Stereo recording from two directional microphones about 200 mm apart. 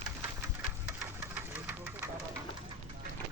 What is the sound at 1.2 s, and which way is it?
Engine, 10° right (ahead or behind).